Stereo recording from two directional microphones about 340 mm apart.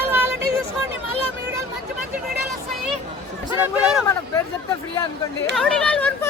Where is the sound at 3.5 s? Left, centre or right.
Centre.